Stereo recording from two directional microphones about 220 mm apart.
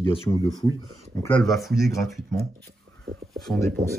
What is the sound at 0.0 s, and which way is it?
Speech, 25° left (ahead or behind).